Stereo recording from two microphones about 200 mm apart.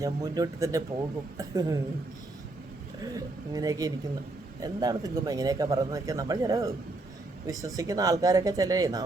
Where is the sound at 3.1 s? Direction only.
20° right (ahead or behind).